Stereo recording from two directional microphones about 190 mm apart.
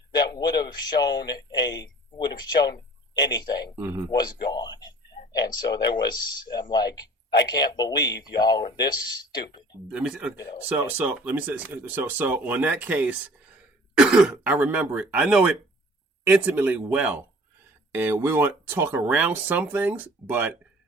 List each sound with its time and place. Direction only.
0.1 s a sound: 20° left (ahead or behind)
1.5 s speech: 20° left (ahead or behind)
3.8 s speech: 10° right (ahead or behind)
4.1 s speech: 20° left (ahead or behind)
9.9 s speech: 5° right (ahead or behind)
10.3 s speech: 20° left (ahead or behind)
10.6 s speech: 5° right (ahead or behind)